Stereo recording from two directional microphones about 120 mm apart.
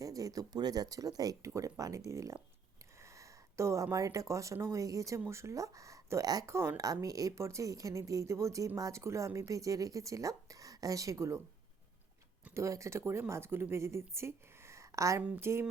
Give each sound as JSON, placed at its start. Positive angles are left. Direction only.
{"t": 0.0, "sound": "speech", "side_deg": -30}
{"t": 12.5, "sound": "speech", "side_deg": -25}